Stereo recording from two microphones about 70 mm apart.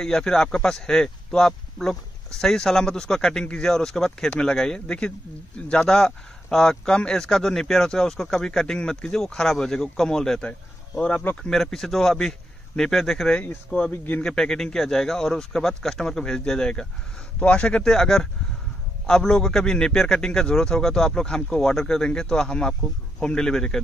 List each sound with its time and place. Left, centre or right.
0.0 s speech: centre
13.7 s speech: centre
13.9 s a man's voice: left
14.2 s speech: centre